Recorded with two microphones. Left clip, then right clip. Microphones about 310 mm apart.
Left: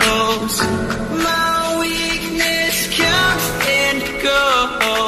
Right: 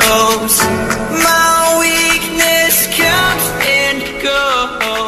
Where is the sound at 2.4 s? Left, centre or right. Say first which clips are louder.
Right 5 dB; right.